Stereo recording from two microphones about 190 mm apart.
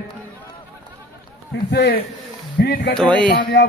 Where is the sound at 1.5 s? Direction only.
60° left (ahead or behind).